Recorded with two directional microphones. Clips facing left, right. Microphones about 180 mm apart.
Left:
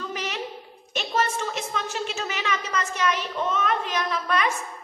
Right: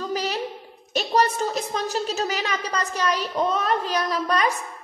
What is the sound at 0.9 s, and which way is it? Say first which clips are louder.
A woman's voice: right 4 dB; 35° right (ahead or behind).